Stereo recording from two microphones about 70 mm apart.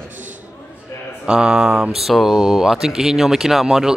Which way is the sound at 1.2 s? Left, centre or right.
Centre.